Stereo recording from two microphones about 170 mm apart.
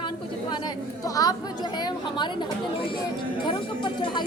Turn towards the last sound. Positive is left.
turn(degrees=30)  # may be behind; listen again after turning